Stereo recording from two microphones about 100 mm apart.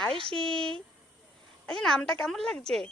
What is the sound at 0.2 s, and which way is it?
Speech, 65° right (ahead or behind).